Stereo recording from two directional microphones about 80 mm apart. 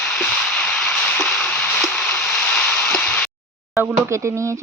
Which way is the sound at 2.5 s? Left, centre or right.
Left.